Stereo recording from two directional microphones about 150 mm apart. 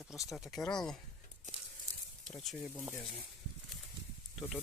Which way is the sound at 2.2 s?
5° left (ahead or behind).